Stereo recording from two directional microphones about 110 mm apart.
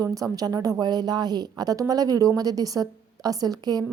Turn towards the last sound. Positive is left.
turn(degrees=-35)  # may be behind; listen again after turning